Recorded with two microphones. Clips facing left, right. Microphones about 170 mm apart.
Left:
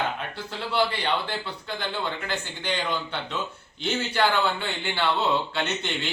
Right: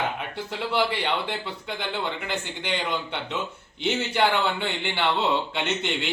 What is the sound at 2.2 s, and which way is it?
A man's voice, 20° right (ahead or behind).